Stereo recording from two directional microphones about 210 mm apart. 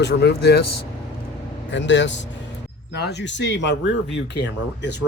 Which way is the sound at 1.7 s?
60° left (ahead or behind).